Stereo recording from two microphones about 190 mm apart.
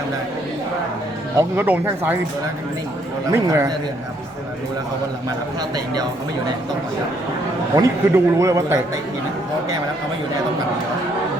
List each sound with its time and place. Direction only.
1.4 s a man's voice: 10° right (ahead or behind)
3.3 s a man's voice: 15° right (ahead or behind)
5.7 s speech: 20° right (ahead or behind)
7.8 s a man's voice: 15° right (ahead or behind)